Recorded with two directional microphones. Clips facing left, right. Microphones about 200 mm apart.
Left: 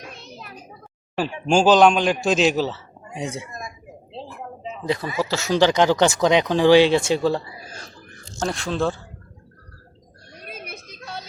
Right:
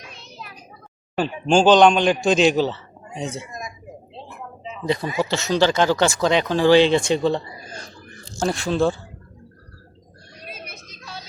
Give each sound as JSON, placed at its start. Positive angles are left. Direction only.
{"t": 0.0, "sound": "child singing", "side_deg": 50}
{"t": 1.1, "sound": "speech", "side_deg": 5}
{"t": 4.1, "sound": "a sound", "side_deg": 35}
{"t": 5.2, "sound": "speech", "side_deg": 5}
{"t": 10.5, "sound": "music", "side_deg": 55}